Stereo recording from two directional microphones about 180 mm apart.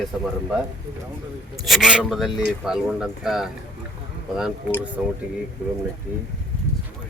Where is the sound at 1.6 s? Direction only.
Centre (ahead or behind).